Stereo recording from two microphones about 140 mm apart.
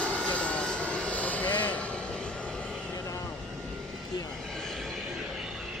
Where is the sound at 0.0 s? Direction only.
10° left (ahead or behind).